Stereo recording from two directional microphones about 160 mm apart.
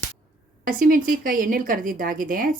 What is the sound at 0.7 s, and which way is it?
A woman's voice, 60° right (ahead or behind).